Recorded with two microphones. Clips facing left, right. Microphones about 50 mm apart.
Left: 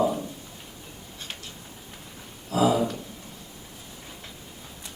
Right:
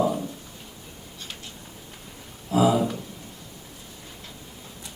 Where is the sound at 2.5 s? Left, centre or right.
Centre.